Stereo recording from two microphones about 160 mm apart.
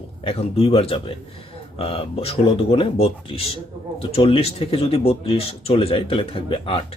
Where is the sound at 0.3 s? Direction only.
35° left (ahead or behind).